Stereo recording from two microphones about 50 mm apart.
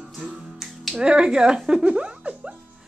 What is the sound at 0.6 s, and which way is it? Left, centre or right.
Music, centre.